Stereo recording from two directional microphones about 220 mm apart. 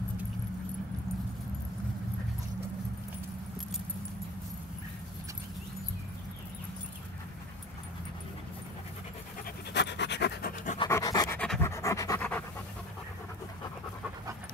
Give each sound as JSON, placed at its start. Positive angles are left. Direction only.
{"t": 9.8, "sound": "pant", "side_deg": 50}
{"t": 10.8, "sound": "pant", "side_deg": 15}